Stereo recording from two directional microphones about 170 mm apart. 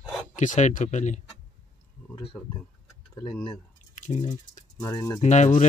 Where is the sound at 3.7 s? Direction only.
45° left (ahead or behind).